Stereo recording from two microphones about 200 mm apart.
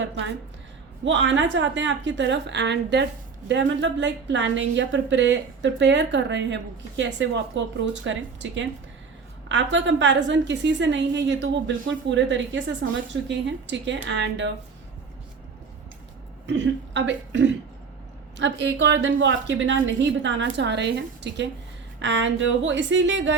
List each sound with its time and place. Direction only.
1.0 s a woman's voice: 65° right (ahead or behind)
16.5 s a woman's voice: 60° right (ahead or behind)